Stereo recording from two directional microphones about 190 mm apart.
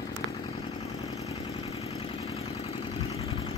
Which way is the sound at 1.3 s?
30° left (ahead or behind).